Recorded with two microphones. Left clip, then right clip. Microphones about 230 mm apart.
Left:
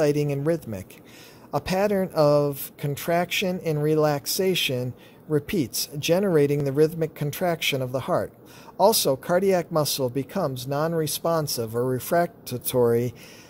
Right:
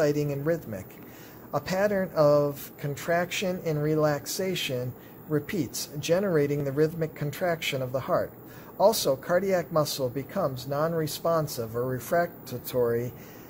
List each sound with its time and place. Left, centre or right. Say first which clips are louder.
0.0 s speech: left 3 dB; left